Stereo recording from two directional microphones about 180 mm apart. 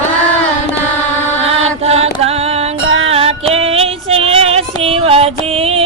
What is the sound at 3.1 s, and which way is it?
Female singing, 35° right (ahead or behind).